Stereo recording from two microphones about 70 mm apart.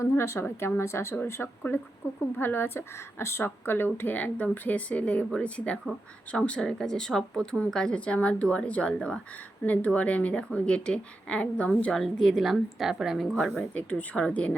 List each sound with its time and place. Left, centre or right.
0.0 s a woman's voice: left
1.4 s a woman's voice: left
2.0 s a woman's voice: left; by 13.3 s centre
13.7 s a woman's voice: centre